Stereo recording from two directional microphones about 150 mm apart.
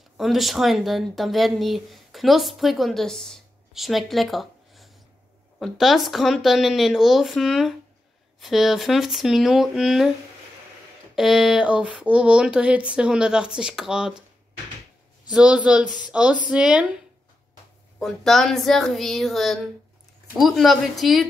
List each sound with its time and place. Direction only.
0.2 s speech: centre (ahead or behind)
11.1 s speech: centre (ahead or behind)
15.2 s speech: 5° right (ahead or behind)
17.9 s speech: centre (ahead or behind)